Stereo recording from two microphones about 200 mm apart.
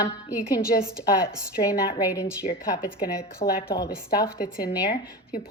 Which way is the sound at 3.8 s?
50° left (ahead or behind).